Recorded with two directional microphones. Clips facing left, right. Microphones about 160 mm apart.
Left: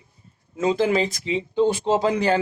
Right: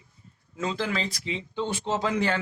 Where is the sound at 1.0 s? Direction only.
45° left (ahead or behind).